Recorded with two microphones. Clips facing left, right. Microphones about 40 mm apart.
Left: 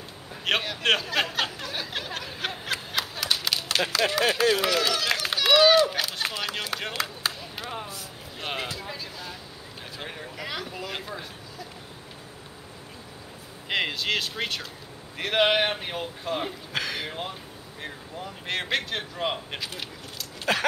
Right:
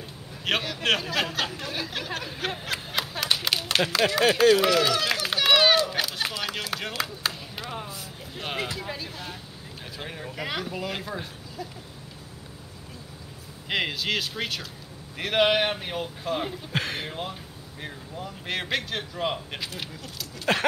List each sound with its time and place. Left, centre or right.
0.5 s speech: centre
2.6 s snicker: centre
3.0 s a sound: centre
3.9 s speech: centre
6.0 s a sound: centre
6.4 s speech: centre
8.6 s speech: centre
9.9 s speech: centre
10.3 s speech: centre
10.9 s speech: centre
13.7 s speech: centre
16.7 s speech: right
17.1 s speech: centre